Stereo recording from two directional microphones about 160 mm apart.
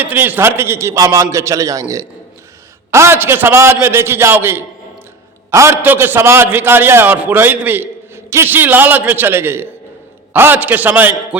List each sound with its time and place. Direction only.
0.0 s a man's voice: 10° right (ahead or behind)